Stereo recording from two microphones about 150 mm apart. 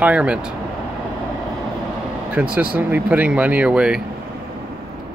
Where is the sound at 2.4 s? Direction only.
10° right (ahead or behind).